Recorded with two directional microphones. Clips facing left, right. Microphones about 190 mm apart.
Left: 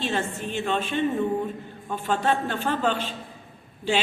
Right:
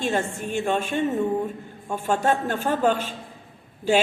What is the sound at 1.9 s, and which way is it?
Speech, 10° right (ahead or behind).